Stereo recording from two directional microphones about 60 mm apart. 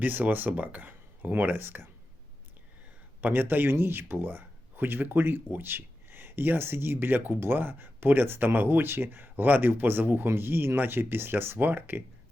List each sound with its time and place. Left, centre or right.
0.0 s speech: right
3.2 s speech: right